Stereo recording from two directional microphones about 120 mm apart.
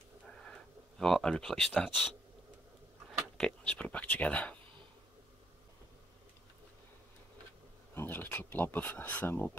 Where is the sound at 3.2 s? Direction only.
5° left (ahead or behind).